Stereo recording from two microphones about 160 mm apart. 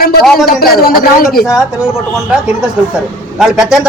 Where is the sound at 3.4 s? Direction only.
5° right (ahead or behind).